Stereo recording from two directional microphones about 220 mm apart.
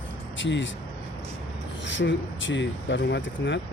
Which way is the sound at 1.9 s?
55° left (ahead or behind).